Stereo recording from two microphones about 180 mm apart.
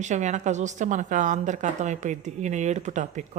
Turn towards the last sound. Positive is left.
turn(degrees=-40)  # may be behind; listen again after turning